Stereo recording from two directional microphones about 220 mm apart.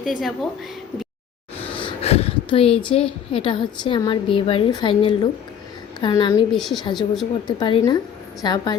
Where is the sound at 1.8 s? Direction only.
25° left (ahead or behind).